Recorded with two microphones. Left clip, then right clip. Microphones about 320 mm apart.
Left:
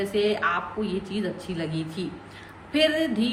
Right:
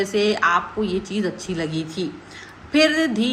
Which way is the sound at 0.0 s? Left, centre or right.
Centre.